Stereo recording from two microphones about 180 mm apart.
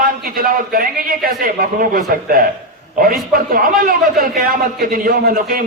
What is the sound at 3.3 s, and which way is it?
A man's voice, 55° right (ahead or behind).